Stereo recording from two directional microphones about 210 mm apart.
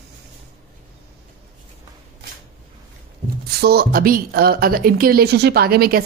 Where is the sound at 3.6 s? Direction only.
50° right (ahead or behind).